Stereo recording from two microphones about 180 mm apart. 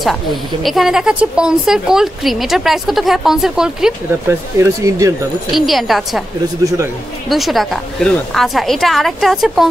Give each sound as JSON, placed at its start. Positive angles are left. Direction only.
{"t": 0.0, "sound": "speech", "side_deg": 0}
{"t": 4.3, "sound": "speech", "side_deg": -15}
{"t": 5.5, "sound": "speech", "side_deg": 0}
{"t": 7.2, "sound": "speech", "side_deg": 0}